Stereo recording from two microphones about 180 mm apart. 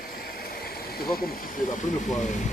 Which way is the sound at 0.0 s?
55° left (ahead or behind).